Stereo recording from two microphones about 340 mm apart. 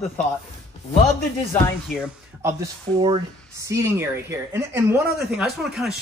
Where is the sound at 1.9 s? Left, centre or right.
Centre.